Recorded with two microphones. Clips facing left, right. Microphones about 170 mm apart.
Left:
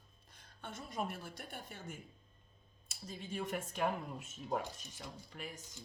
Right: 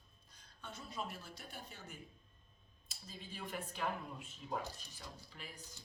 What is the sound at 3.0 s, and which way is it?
Speech, 45° left (ahead or behind).